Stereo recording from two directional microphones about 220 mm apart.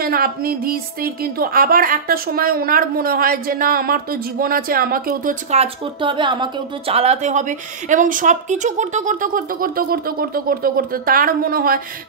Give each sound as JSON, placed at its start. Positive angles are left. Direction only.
{"t": 0.0, "sound": "a woman's voice", "side_deg": -45}